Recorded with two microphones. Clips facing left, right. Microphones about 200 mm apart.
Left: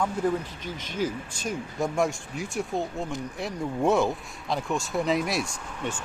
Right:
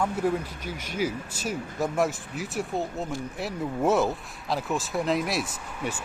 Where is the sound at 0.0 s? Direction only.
5° right (ahead or behind).